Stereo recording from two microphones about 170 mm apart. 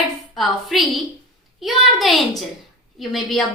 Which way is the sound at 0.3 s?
Centre (ahead or behind).